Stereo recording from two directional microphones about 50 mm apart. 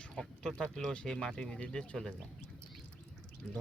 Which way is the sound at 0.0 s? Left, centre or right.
Centre.